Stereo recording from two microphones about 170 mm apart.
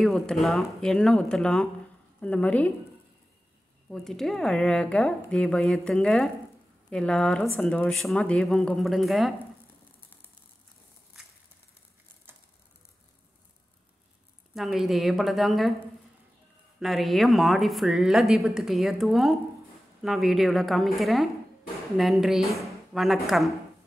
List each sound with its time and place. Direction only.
0.0 s a woman's voice: centre (ahead or behind)
3.9 s speech: centre (ahead or behind)
14.5 s speech: centre (ahead or behind)